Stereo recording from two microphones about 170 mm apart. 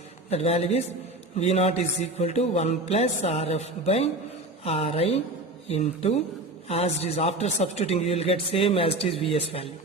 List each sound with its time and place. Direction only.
0.3 s a man's voice: 40° left (ahead or behind)